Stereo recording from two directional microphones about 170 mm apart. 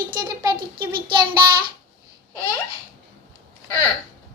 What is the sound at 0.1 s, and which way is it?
Child singing, 25° right (ahead or behind).